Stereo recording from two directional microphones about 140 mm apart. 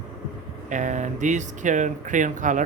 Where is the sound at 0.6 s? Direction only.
60° right (ahead or behind).